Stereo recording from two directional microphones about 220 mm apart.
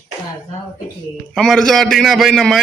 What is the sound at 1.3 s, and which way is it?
A man's voice, centre (ahead or behind).